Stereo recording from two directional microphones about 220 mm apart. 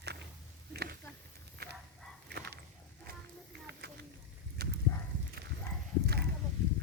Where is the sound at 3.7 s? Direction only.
50° right (ahead or behind).